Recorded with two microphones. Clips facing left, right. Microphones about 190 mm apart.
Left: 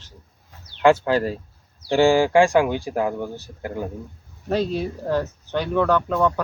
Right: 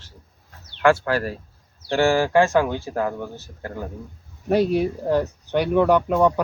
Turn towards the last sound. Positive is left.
turn(degrees=-15)  # may be behind; listen again after turning